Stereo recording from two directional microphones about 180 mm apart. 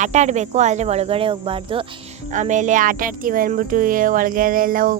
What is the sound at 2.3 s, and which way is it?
Speech, 45° right (ahead or behind).